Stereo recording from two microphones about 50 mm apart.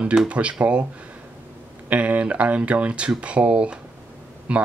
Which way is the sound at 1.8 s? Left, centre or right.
Right.